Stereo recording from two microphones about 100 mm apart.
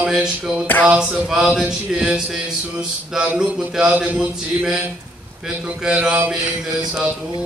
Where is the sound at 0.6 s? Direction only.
15° left (ahead or behind).